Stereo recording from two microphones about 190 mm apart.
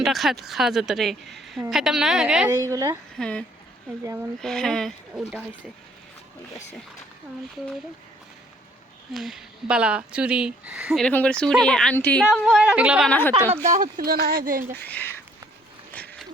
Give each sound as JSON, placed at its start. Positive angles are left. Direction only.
{"t": 0.0, "sound": "speech", "side_deg": 0}
{"t": 2.6, "sound": "a woman's voice", "side_deg": -15}
{"t": 3.2, "sound": "speech", "side_deg": 5}
{"t": 9.1, "sound": "speech", "side_deg": -5}
{"t": 12.2, "sound": "speech", "side_deg": -5}
{"t": 13.1, "sound": "speech", "side_deg": 10}
{"t": 13.5, "sound": "speech", "side_deg": -40}
{"t": 14.8, "sound": "speech", "side_deg": 10}
{"t": 15.9, "sound": "a sound", "side_deg": 10}